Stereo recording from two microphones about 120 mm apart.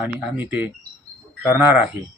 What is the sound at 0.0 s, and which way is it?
Speech, 15° right (ahead or behind).